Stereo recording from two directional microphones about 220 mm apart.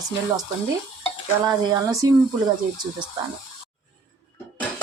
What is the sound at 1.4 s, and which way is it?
Speech, 15° right (ahead or behind).